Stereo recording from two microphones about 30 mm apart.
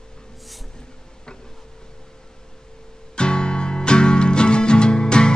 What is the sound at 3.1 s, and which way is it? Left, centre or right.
Music, left.